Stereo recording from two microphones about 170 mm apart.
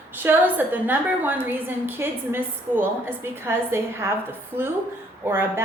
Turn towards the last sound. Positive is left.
turn(degrees=-15)  # may be behind; listen again after turning